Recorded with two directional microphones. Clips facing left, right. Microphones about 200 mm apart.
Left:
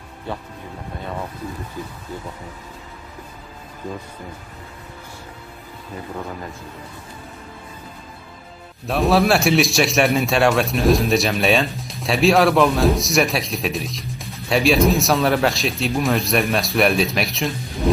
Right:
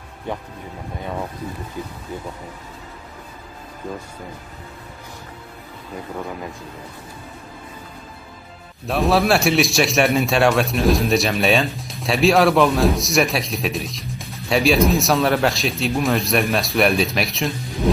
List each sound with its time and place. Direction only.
0.3 s speech: 15° right (ahead or behind)
8.8 s a man's voice: centre (ahead or behind)